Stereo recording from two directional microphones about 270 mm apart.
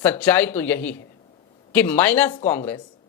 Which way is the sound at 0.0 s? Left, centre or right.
Centre.